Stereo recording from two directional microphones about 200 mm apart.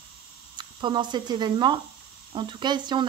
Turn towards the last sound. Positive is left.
turn(degrees=-20)  # may be behind; listen again after turning